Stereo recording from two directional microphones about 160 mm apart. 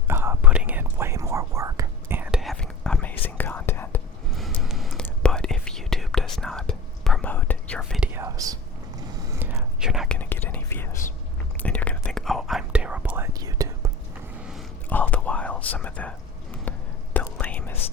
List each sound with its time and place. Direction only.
0.1 s whispering: 15° right (ahead or behind); by 4.0 s 10° left (ahead or behind)
4.3 s whispering: centre (ahead or behind)
7.8 s whispering: centre (ahead or behind)
8.1 s whispering: 20° right (ahead or behind); by 10.2 s 5° right (ahead or behind)
10.2 s whispering: 10° left (ahead or behind); by 13.9 s 20° right (ahead or behind)
14.8 s whispering: 10° left (ahead or behind)
17.2 s whispering: 10° left (ahead or behind)